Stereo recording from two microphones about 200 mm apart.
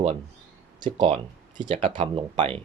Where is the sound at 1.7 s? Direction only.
40° right (ahead or behind).